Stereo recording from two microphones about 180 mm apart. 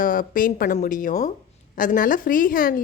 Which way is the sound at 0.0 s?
50° left (ahead or behind).